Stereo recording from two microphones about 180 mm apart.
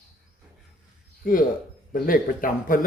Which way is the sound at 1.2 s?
50° left (ahead or behind).